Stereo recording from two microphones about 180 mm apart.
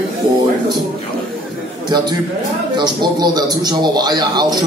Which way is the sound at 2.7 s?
25° right (ahead or behind).